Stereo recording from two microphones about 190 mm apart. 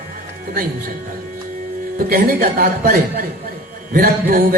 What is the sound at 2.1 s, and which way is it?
Mantra, 50° right (ahead or behind).